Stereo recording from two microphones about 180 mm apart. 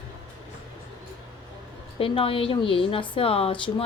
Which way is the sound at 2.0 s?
30° left (ahead or behind).